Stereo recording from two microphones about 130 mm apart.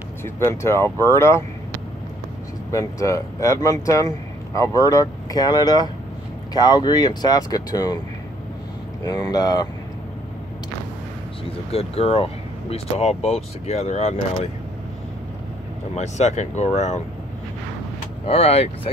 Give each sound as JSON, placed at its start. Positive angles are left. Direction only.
{"t": 0.2, "sound": "speech", "side_deg": 20}
{"t": 2.7, "sound": "speech", "side_deg": 25}
{"t": 9.0, "sound": "speech", "side_deg": 30}
{"t": 11.7, "sound": "speech", "side_deg": 50}
{"t": 16.0, "sound": "speech", "side_deg": 60}
{"t": 18.2, "sound": "speech", "side_deg": 50}